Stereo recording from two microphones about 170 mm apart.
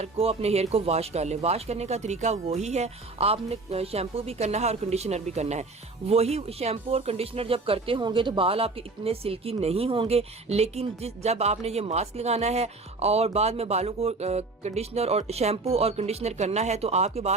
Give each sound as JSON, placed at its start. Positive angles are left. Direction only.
{"t": 0.0, "sound": "speech", "side_deg": -35}